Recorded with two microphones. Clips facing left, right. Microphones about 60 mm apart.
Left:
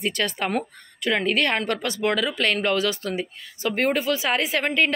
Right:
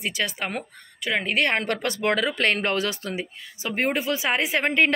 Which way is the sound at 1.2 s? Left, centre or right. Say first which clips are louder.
Right 1 dB; right.